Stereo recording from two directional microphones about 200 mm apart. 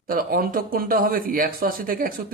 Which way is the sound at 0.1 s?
45° right (ahead or behind).